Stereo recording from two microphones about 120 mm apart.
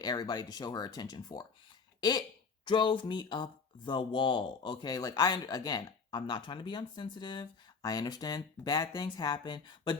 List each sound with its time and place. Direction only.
0.0 s speech: 35° left (ahead or behind)